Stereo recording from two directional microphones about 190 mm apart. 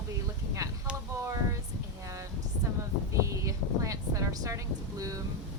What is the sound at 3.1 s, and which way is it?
Speech, 15° right (ahead or behind).